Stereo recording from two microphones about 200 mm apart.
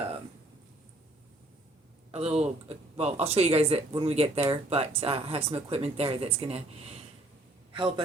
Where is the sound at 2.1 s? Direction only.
30° right (ahead or behind).